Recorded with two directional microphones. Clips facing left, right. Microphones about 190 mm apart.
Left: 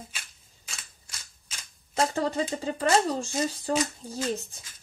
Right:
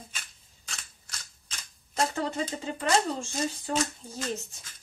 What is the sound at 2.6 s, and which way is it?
Speech, 35° left (ahead or behind).